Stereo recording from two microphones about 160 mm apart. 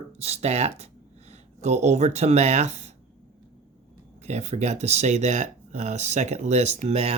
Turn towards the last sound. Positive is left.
turn(degrees=-40)  # may be behind; listen again after turning